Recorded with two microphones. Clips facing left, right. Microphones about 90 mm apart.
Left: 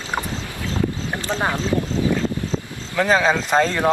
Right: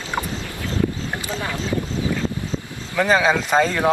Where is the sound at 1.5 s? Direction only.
20° left (ahead or behind).